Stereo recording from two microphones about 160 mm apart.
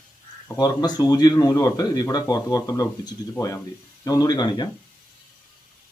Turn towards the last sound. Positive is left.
turn(degrees=25)  # may be behind; listen again after turning